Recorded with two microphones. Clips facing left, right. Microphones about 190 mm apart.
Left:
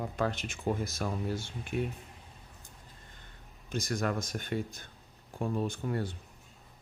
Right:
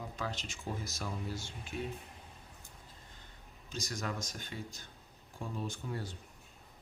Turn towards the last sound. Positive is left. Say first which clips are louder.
# left 7 dB
turn(degrees=55)  # may be behind; listen again after turning